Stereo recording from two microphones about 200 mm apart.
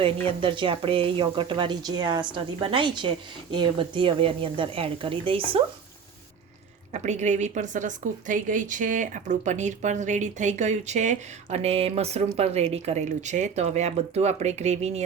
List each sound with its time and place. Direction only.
0.0 s speech: 25° right (ahead or behind)
6.9 s a woman's voice: 35° right (ahead or behind)